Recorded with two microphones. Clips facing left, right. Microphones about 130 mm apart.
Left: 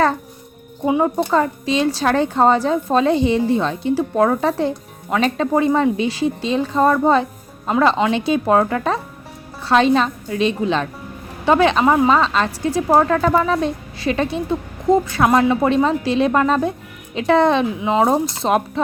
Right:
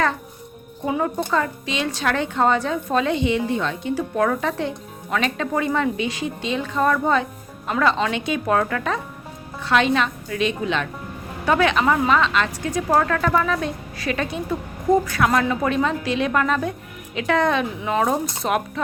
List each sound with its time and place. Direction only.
0.9 s a woman's voice: 20° left (ahead or behind)
1.1 s a woman's voice: 35° left (ahead or behind)